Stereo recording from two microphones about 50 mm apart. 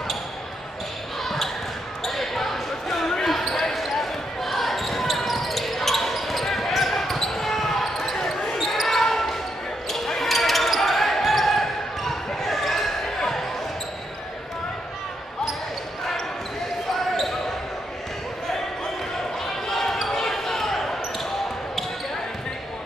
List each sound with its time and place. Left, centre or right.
1.2 s basketball bounce: centre
19.4 s basketball bounce: centre